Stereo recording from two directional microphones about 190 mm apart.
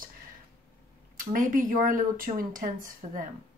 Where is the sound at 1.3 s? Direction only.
45° right (ahead or behind).